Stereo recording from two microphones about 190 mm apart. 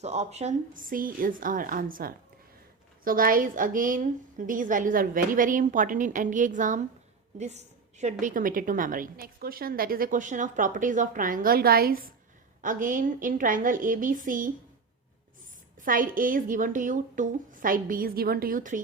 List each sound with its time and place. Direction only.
0.0 s a woman's voice: 35° right (ahead or behind)
15.8 s a woman's voice: 45° right (ahead or behind)